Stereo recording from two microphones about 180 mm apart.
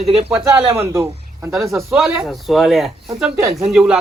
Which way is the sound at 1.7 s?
Centre (ahead or behind).